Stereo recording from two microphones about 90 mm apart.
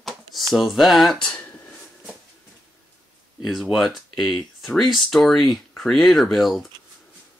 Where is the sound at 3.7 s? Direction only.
Centre (ahead or behind).